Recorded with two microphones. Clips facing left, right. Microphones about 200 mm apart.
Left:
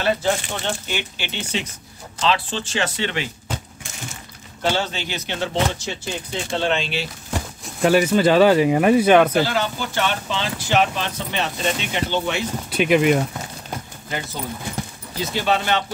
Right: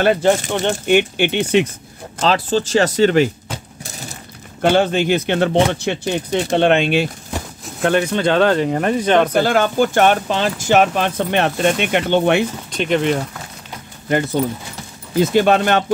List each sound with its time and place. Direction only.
0.0 s speech: 50° right (ahead or behind)
2.1 s speech: 40° right (ahead or behind)
4.6 s speech: 55° right (ahead or behind)
7.6 s speech: 5° left (ahead or behind)
9.3 s speech: 55° right (ahead or behind)
12.7 s speech: 5° left (ahead or behind)
15.1 s speech: 55° right (ahead or behind)